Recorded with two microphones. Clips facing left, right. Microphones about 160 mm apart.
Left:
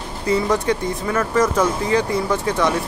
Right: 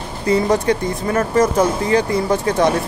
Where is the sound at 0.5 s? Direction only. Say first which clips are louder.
Right 3 dB; 40° right (ahead or behind).